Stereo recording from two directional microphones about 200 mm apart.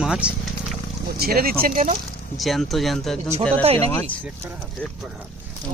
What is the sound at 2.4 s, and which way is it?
Speech, centre (ahead or behind).